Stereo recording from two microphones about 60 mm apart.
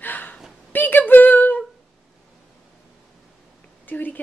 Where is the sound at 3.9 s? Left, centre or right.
Left.